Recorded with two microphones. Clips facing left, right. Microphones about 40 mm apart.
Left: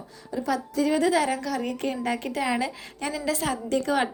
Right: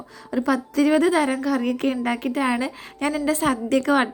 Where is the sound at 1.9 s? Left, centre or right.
Right; by 3.4 s centre.